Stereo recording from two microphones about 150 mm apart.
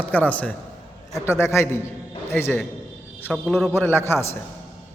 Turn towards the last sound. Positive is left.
turn(degrees=15)  # may be behind; listen again after turning